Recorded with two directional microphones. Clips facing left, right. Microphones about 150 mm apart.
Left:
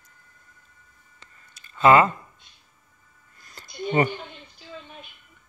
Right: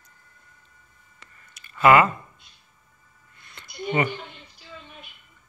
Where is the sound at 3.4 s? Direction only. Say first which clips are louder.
Left 1 dB; 40° left (ahead or behind).